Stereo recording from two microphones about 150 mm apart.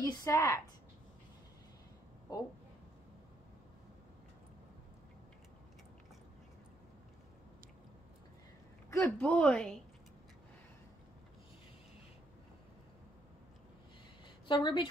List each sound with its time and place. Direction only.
0.0 s a woman's voice: 20° left (ahead or behind)
8.9 s a woman's voice: 10° left (ahead or behind)
14.5 s a woman's voice: 30° left (ahead or behind)